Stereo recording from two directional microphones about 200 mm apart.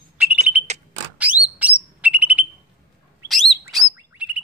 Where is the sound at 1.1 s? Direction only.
5° right (ahead or behind).